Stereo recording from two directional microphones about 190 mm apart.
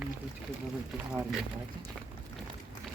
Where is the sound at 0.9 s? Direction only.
5° right (ahead or behind).